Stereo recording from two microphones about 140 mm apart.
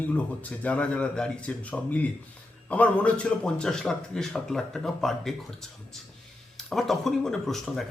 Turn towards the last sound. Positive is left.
turn(degrees=0)  # may be behind; listen again after turning